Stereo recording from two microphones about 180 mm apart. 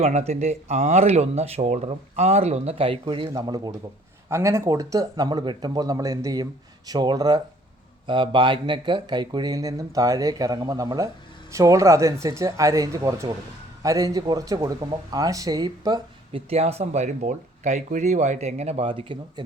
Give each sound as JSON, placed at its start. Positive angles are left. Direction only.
{"t": 0.0, "sound": "speech", "side_deg": -35}
{"t": 16.5, "sound": "speech", "side_deg": -35}